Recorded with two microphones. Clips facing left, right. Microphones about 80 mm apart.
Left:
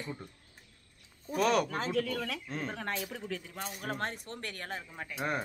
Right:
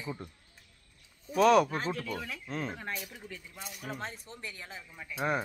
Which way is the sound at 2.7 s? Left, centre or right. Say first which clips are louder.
Left 3 dB; left.